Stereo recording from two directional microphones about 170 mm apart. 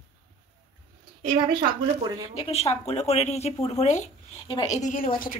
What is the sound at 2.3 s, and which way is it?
Speech, 40° left (ahead or behind).